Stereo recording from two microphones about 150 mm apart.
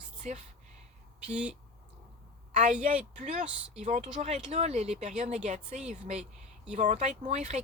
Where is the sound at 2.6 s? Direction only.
50° right (ahead or behind).